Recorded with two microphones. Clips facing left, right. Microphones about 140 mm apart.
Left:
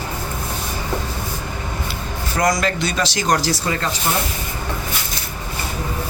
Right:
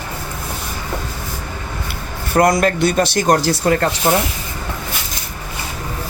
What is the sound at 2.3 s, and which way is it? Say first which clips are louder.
Speech: right 5 dB; 55° right (ahead or behind).